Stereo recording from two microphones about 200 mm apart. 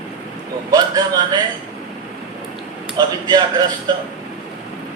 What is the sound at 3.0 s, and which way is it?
Speech, 20° right (ahead or behind).